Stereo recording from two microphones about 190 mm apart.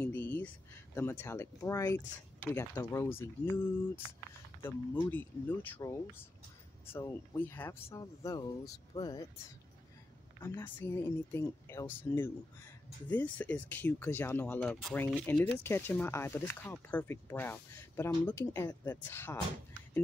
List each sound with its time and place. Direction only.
0.0 s a sound: 10° left (ahead or behind)
0.9 s speech: 15° left (ahead or behind)
10.4 s speech: 10° left (ahead or behind)